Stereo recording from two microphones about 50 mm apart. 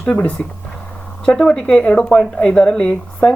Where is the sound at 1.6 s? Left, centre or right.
Centre.